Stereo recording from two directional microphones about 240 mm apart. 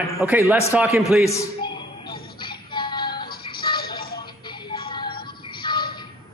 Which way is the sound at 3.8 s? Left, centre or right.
Left.